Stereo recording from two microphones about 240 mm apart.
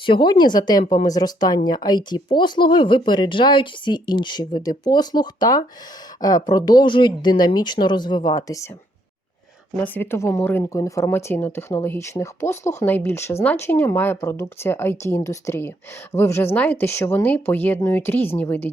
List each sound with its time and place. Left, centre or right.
0.0 s speech: centre
9.8 s speech: centre